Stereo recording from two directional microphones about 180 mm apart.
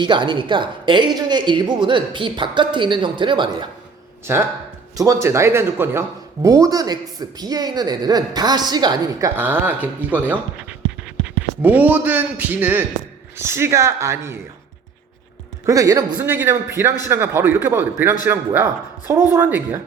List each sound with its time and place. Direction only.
0.0 s speech: 25° right (ahead or behind)
4.9 s speech: 15° right (ahead or behind)
9.3 s speech: 10° right (ahead or behind)
15.6 s speech: 20° right (ahead or behind)